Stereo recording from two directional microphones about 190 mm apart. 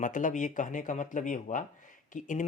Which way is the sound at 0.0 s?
40° left (ahead or behind).